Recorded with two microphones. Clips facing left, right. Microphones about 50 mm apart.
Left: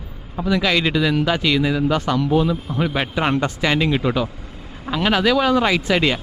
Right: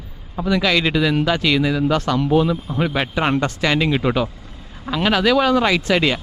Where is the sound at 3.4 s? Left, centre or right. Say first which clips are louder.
Even; centre.